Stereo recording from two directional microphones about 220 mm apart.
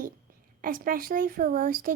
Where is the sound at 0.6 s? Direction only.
40° right (ahead or behind).